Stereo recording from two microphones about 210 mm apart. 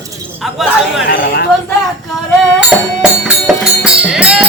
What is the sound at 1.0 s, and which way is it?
Speech, 50° left (ahead or behind).